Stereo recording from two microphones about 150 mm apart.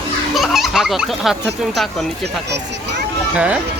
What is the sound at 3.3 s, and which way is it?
Speech, 10° right (ahead or behind).